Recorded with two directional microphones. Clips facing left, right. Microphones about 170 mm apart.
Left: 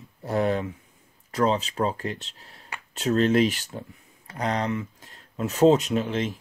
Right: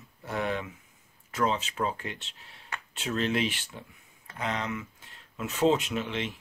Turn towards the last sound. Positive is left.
turn(degrees=40)  # may be behind; listen again after turning